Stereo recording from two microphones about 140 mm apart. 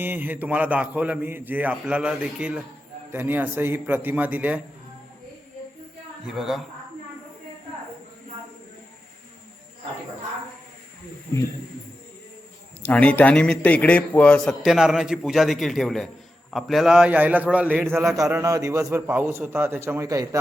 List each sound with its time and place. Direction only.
0.0 s a man's voice: 15° right (ahead or behind)
6.2 s a man's voice: 5° right (ahead or behind)
12.8 s a man's voice: 10° left (ahead or behind); by 17.8 s 10° right (ahead or behind)
18.4 s a man's voice: 25° right (ahead or behind)